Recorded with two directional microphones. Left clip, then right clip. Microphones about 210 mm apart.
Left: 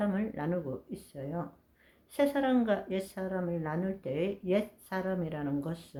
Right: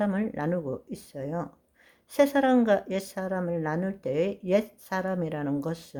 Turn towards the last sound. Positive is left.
turn(degrees=-45)  # may be behind; listen again after turning